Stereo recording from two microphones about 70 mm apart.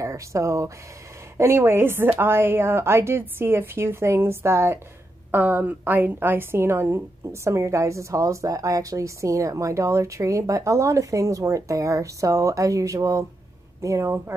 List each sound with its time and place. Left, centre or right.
0.0 s speech: right
1.4 s a woman's voice: right